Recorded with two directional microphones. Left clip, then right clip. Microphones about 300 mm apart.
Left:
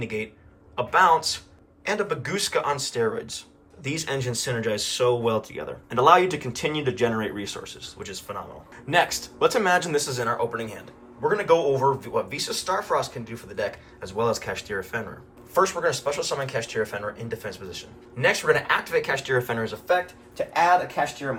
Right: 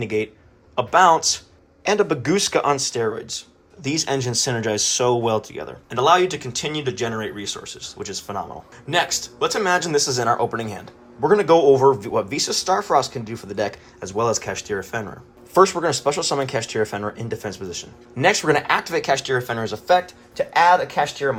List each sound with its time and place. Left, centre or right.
0.0 s speech: centre
20.3 s speech: right